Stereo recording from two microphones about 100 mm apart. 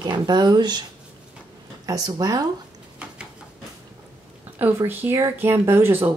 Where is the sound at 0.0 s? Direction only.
45° right (ahead or behind).